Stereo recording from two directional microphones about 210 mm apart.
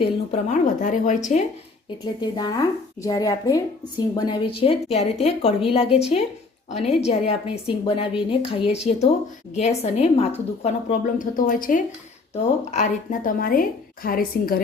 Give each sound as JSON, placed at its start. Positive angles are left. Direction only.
{"t": 0.0, "sound": "a woman's voice", "side_deg": 30}
{"t": 2.3, "sound": "a woman's voice", "side_deg": 20}